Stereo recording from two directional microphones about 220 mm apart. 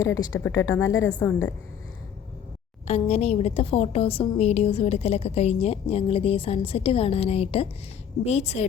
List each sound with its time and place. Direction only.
0.4 s speech: 15° left (ahead or behind)
2.8 s a woman's voice: 30° left (ahead or behind)